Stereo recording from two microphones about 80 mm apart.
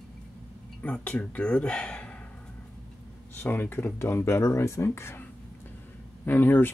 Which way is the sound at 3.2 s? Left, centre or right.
Left.